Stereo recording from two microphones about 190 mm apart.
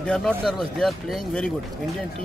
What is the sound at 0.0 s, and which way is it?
Speech, 5° left (ahead or behind).